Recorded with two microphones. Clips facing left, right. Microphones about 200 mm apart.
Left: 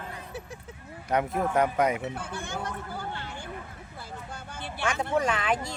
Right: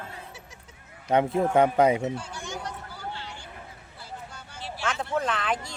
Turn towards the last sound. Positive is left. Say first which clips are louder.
# left 2 dB
turn(degrees=5)  # may be behind; listen again after turning